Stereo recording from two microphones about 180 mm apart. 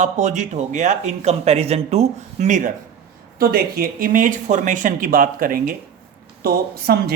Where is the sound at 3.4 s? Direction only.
55° right (ahead or behind).